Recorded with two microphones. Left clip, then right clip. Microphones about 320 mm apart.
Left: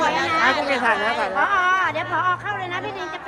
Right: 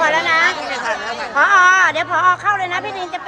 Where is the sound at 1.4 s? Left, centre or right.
Right.